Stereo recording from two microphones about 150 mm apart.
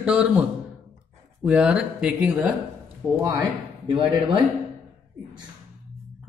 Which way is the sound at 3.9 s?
35° right (ahead or behind).